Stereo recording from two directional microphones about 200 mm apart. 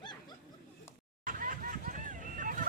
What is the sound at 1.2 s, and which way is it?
Vehicle, 45° right (ahead or behind).